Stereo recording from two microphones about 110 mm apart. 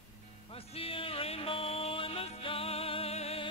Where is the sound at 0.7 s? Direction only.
60° left (ahead or behind).